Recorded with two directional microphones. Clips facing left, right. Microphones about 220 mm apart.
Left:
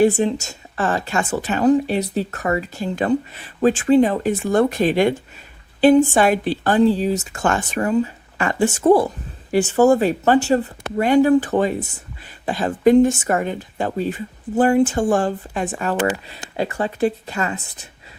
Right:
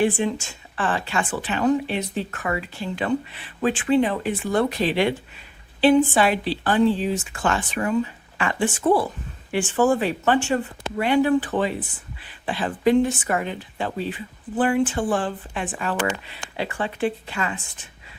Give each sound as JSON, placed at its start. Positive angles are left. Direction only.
{"t": 0.0, "sound": "a woman's voice", "side_deg": 40}